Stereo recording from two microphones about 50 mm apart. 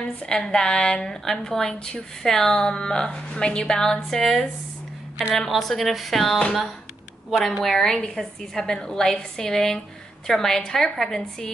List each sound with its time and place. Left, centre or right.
0.3 s a woman's voice: centre
7.6 s a woman's voice: centre